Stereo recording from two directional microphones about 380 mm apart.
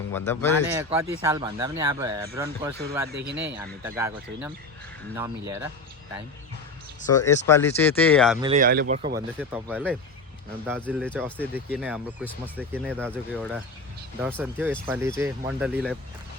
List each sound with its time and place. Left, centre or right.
0.1 s speech: centre
0.8 s speech: centre
3.1 s speech: right
3.8 s speech: centre
7.4 s speech: centre
8.4 s speech: centre
9.4 s speech: centre